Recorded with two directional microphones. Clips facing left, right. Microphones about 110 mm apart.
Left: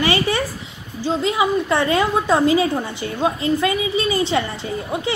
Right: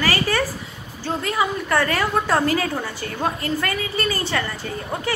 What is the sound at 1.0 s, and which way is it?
A woman's voice, 15° left (ahead or behind).